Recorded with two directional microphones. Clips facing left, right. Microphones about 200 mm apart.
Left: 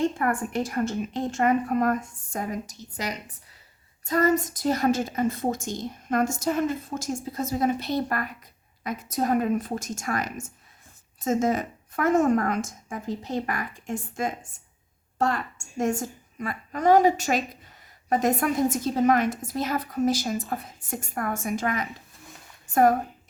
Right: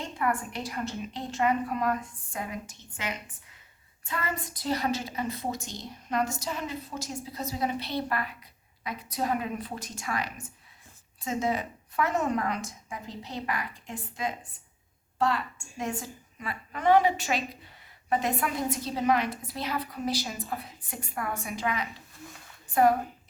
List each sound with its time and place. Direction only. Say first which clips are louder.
0.2 s a woman's voice: left 4 dB; 45° left (ahead or behind)